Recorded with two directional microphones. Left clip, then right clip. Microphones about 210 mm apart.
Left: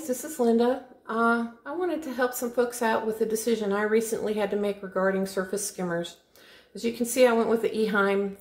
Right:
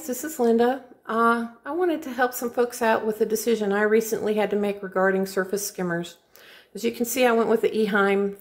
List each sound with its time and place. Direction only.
0.0 s a woman's voice: 30° right (ahead or behind)